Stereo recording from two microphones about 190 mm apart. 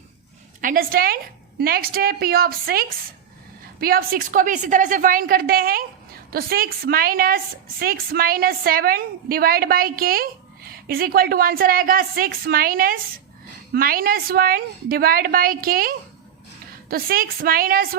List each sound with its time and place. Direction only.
0.6 s a woman's voice: 45° right (ahead or behind)